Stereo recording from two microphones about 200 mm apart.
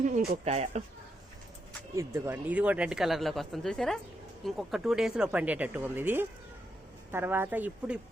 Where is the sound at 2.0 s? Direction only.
15° right (ahead or behind).